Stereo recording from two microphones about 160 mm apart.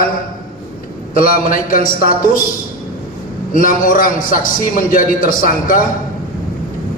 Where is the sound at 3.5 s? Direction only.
60° left (ahead or behind).